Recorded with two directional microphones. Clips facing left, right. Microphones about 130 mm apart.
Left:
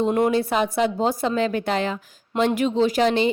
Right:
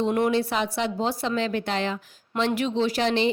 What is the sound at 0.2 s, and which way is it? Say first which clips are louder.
A woman's voice: left 3 dB; 45° left (ahead or behind).